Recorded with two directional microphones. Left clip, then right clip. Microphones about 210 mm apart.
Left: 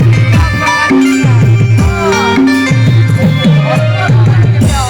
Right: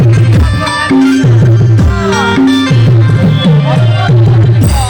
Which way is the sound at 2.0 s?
35° left (ahead or behind).